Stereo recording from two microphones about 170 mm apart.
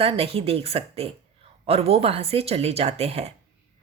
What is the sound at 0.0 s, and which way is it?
A woman's voice, 35° right (ahead or behind).